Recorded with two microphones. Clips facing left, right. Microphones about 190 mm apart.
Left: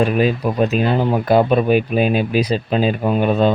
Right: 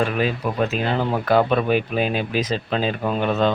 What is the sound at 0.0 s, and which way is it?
Speech, 15° left (ahead or behind).